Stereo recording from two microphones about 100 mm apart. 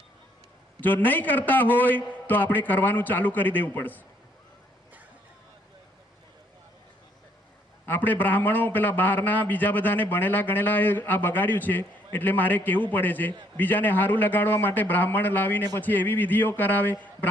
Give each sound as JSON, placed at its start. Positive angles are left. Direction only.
{"t": 0.8, "sound": "a man's voice", "side_deg": 20}
{"t": 7.9, "sound": "a man's voice", "side_deg": 20}